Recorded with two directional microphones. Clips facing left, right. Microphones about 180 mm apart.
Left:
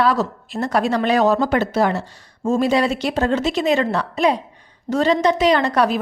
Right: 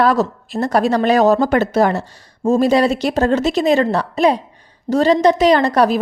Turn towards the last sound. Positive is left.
turn(degrees=-40)  # may be behind; listen again after turning